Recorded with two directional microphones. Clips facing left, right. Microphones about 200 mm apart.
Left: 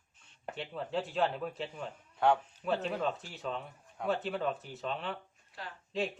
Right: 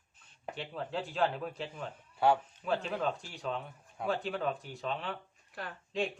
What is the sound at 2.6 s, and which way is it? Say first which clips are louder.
A man's voice: left 1 dB; centre (ahead or behind).